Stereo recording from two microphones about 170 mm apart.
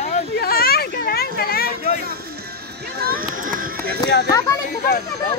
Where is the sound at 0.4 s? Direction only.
60° left (ahead or behind).